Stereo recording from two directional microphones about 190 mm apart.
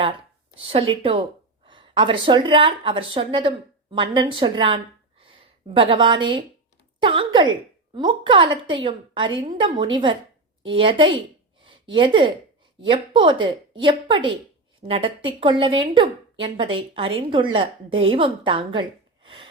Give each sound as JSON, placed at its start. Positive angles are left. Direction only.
{"t": 0.5, "sound": "a woman's voice", "side_deg": -30}